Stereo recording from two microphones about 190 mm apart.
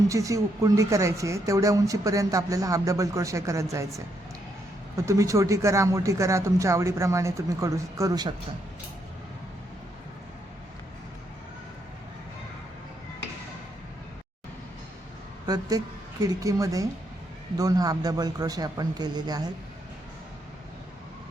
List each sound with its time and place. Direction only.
0.1 s speech: 15° right (ahead or behind)
15.4 s speech: 20° right (ahead or behind)